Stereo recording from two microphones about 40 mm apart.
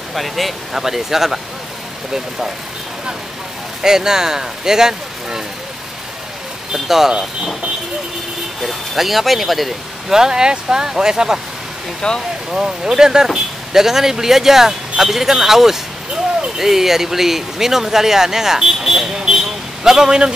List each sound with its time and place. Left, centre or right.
0.1 s speech: centre
3.8 s speech: centre
6.7 s speech: centre
8.6 s speech: centre
10.1 s speech: centre
12.0 s speech: centre
12.4 s speech: centre
19.1 s vehicle: centre